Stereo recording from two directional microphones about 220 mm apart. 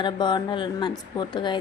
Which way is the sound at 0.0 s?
20° left (ahead or behind).